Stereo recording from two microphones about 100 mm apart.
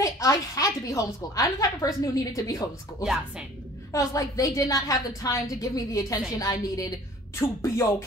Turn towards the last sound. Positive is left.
turn(degrees=25)  # may be behind; listen again after turning